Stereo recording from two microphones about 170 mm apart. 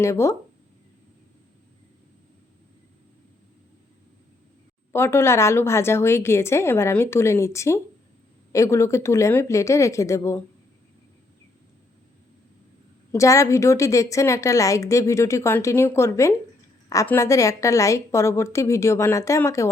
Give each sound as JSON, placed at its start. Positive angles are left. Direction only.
{"t": 0.0, "sound": "a woman's voice", "side_deg": 15}
{"t": 4.9, "sound": "a woman's voice", "side_deg": 15}
{"t": 13.1, "sound": "a woman's voice", "side_deg": 20}